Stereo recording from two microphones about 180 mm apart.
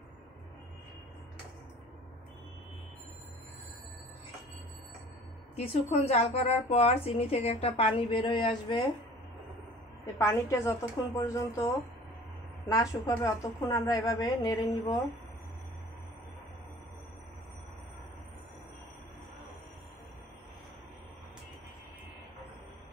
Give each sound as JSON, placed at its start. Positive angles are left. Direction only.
{"t": 5.6, "sound": "speech", "side_deg": 35}
{"t": 10.1, "sound": "a woman's voice", "side_deg": 15}
{"t": 12.6, "sound": "a woman's voice", "side_deg": 20}